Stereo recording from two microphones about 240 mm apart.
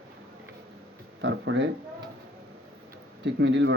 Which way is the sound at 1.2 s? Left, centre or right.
Right.